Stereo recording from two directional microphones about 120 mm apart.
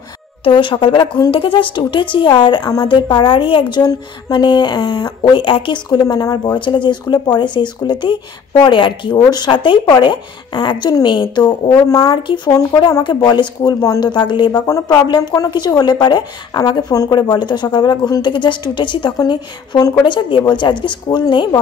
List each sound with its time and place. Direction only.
0.4 s a woman's voice: 45° left (ahead or behind)